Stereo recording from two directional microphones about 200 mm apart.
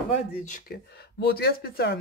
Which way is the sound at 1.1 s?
50° left (ahead or behind).